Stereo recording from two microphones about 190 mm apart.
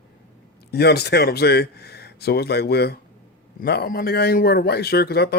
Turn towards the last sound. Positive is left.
turn(degrees=55)  # may be behind; listen again after turning